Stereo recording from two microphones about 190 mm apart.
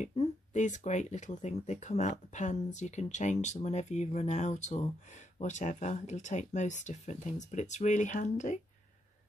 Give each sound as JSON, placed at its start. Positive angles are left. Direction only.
{"t": 0.0, "sound": "speech", "side_deg": 35}